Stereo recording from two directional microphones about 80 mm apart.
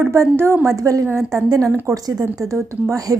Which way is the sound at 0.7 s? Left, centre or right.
Right.